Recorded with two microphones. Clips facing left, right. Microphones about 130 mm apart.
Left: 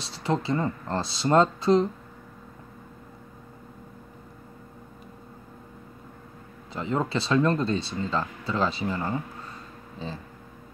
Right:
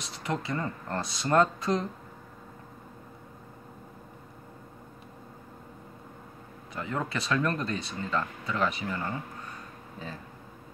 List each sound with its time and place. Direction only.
0.0 s speech: 30° left (ahead or behind)
6.7 s speech: 25° left (ahead or behind)